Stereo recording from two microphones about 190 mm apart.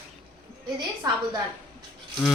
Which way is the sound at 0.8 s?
20° right (ahead or behind).